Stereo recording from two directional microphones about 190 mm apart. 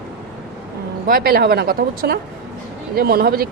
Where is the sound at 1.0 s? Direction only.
50° right (ahead or behind).